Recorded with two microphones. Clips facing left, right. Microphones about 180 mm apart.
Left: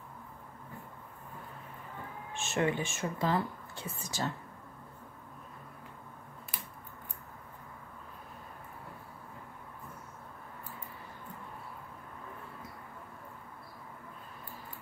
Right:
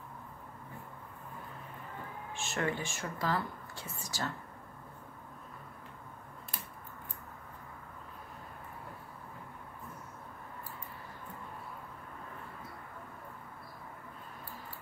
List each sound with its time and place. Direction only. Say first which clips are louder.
2.3 s speech: left 4 dB; 20° left (ahead or behind)